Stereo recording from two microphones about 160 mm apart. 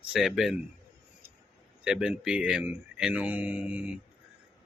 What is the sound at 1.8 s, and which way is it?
Speech, 5° right (ahead or behind).